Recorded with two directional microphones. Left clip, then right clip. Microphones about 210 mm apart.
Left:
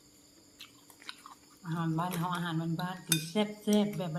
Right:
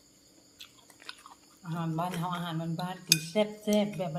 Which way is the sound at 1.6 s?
5° right (ahead or behind).